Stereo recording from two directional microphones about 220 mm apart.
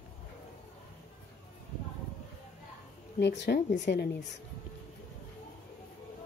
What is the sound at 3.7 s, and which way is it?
Speech, 50° left (ahead or behind).